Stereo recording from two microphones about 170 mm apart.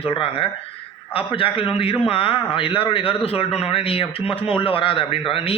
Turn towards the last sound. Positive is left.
turn(degrees=35)  # may be behind; listen again after turning